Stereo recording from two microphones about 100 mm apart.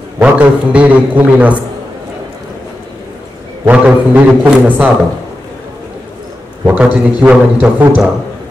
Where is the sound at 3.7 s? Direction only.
15° right (ahead or behind).